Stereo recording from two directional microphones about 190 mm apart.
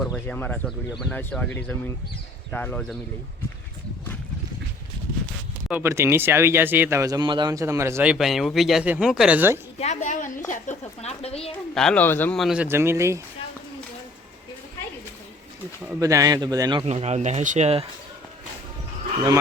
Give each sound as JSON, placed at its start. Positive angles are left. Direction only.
{"t": 0.0, "sound": "a man's voice", "side_deg": 0}
{"t": 5.6, "sound": "speech", "side_deg": -10}
{"t": 9.8, "sound": "speech", "side_deg": 40}
{"t": 11.7, "sound": "a man's voice", "side_deg": 5}
{"t": 12.6, "sound": "speech", "side_deg": -10}
{"t": 16.0, "sound": "a man's voice", "side_deg": -15}
{"t": 16.8, "sound": "speech", "side_deg": -35}